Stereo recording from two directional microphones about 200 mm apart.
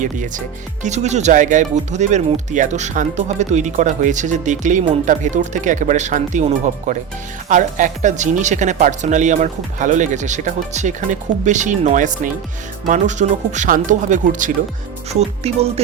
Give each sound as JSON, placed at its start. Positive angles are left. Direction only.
{"t": 0.0, "sound": "speech", "side_deg": -40}